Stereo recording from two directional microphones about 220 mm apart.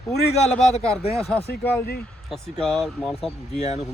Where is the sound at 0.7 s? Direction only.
30° left (ahead or behind).